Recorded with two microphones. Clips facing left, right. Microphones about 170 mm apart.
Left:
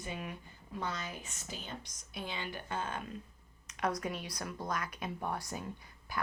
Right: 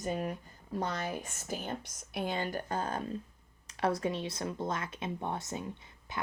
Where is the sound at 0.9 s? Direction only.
55° right (ahead or behind).